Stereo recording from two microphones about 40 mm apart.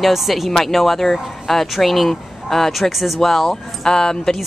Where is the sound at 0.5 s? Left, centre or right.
Centre.